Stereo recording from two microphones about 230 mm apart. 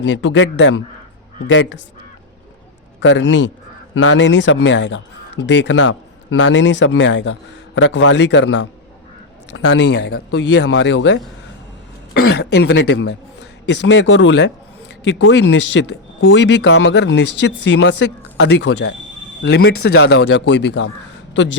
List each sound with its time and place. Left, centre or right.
0.0 s speech: left
3.0 s a man's voice: left
16.6 s speech: left
16.9 s speech: left